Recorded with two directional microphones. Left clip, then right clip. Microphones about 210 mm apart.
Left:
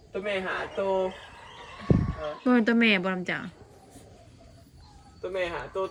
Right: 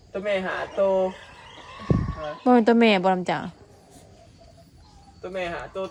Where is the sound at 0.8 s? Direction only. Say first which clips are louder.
Right 6 dB; centre (ahead or behind).